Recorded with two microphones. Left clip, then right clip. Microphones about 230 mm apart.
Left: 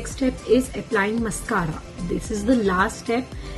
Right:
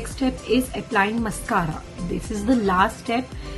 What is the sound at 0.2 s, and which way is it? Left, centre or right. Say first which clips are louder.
Speech: left 2 dB; centre.